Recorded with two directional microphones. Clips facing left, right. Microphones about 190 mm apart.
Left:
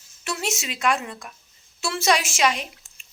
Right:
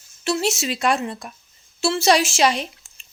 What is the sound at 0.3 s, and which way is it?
A woman's voice, 30° right (ahead or behind).